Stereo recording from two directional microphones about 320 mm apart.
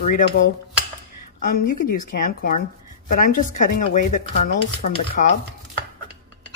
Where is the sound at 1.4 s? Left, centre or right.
Left.